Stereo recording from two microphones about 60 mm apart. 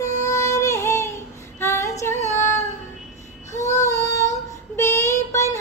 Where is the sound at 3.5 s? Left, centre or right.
Left.